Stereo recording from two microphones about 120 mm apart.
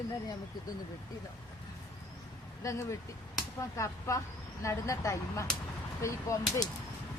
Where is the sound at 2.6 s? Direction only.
25° left (ahead or behind).